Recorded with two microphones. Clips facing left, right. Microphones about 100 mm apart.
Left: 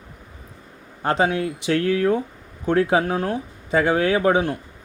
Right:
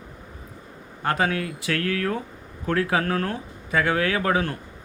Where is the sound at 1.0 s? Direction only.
25° left (ahead or behind).